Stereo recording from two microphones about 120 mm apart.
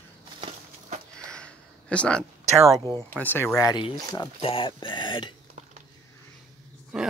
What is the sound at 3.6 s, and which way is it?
Speech, 35° left (ahead or behind).